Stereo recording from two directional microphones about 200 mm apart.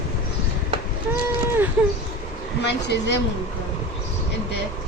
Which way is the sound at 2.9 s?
60° left (ahead or behind).